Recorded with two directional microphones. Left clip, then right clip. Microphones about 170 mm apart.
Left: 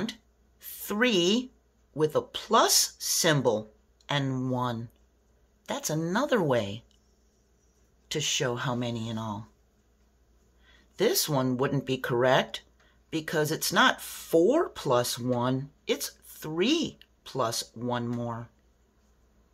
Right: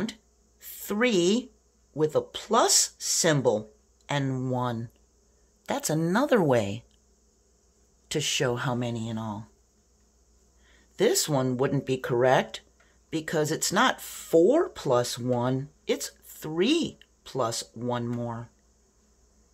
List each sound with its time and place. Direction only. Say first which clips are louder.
0.0 s a sound: right 1 dB; 15° right (ahead or behind)
2.0 s speech: right 1 dB; 15° right (ahead or behind)
8.1 s speech: right 2 dB; 25° right (ahead or behind)
10.6 s speech: right 2 dB; 15° right (ahead or behind)